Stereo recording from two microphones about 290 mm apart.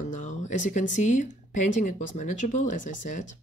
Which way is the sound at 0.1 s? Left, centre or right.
Left.